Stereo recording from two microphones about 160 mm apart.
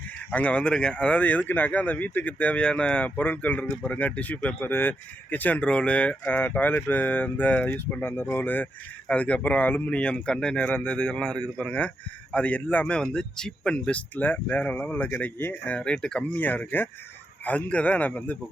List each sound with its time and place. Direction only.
0.3 s speech: 10° left (ahead or behind)